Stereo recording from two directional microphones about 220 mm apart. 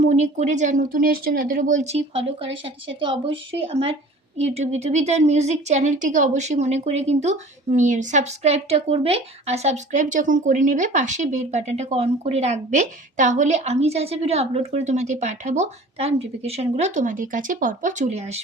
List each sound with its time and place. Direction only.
0.1 s a woman's voice: 30° right (ahead or behind)